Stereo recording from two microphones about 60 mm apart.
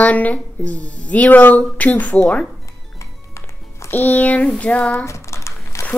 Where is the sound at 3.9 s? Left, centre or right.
Left.